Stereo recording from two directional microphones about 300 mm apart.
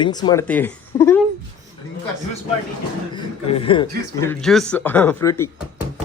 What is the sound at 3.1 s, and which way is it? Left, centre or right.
A man's voice, centre.